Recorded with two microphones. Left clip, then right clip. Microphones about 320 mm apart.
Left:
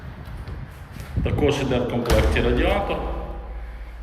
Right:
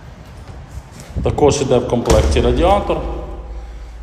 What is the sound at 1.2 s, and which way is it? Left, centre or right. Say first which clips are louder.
A man's voice: right 8 dB; centre.